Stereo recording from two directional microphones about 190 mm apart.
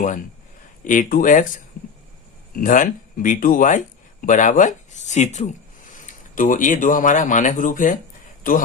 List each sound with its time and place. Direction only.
0.9 s speech: 45° left (ahead or behind)